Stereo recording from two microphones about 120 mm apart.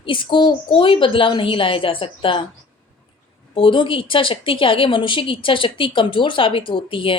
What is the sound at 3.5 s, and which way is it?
Speech, 45° left (ahead or behind).